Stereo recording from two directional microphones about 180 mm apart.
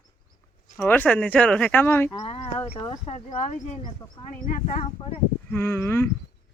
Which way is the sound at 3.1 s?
40° left (ahead or behind).